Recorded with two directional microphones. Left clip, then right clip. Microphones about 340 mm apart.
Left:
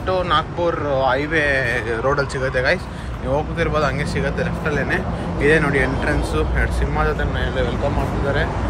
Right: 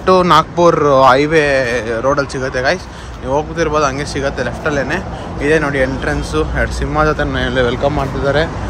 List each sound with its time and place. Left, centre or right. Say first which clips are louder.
0.0 s speech: right 9 dB; centre